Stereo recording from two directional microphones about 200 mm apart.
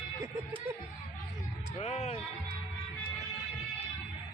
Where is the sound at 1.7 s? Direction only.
30° left (ahead or behind).